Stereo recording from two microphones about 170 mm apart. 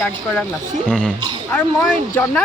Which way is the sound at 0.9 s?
5° right (ahead or behind).